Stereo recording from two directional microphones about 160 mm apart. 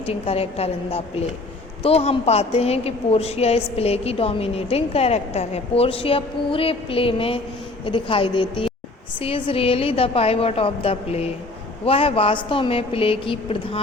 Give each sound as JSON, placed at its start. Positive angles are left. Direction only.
{"t": 0.0, "sound": "a woman's voice", "side_deg": 40}